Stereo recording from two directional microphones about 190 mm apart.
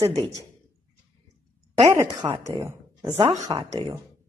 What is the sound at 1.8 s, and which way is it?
A woman's voice, 20° right (ahead or behind).